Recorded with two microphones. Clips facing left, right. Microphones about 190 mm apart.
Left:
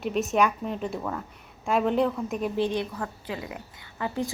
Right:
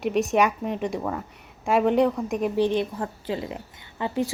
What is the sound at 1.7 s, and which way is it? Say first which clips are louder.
Speech: right 4 dB; 5° right (ahead or behind).